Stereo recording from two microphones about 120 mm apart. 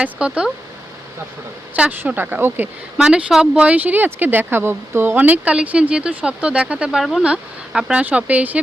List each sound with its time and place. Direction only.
0.0 s speech: 10° right (ahead or behind)
1.7 s speech: 15° right (ahead or behind)
3.0 s speech: 5° right (ahead or behind)